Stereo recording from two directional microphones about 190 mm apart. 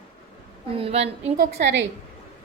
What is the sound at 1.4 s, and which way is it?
Speech, 70° right (ahead or behind).